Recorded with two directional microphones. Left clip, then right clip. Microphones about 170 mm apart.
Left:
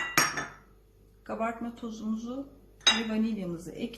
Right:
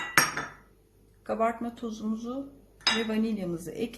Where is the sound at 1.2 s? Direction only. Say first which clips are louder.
Right 5 dB; 50° right (ahead or behind).